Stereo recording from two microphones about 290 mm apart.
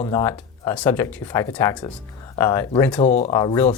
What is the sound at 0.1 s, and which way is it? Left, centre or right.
Speech, centre.